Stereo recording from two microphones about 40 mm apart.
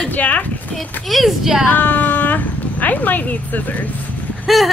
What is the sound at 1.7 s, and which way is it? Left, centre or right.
Speech, left.